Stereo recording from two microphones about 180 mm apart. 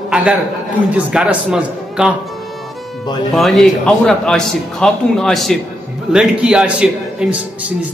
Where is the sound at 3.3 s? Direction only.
Centre (ahead or behind).